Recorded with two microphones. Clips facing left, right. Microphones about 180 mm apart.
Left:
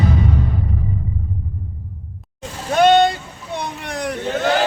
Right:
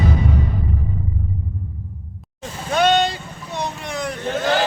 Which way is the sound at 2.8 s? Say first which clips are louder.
Left 5 dB; 50° left (ahead or behind).